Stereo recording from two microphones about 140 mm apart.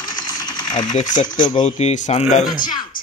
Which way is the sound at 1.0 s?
65° left (ahead or behind).